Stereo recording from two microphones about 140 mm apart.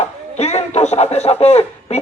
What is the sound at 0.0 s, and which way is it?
Speech, 50° left (ahead or behind).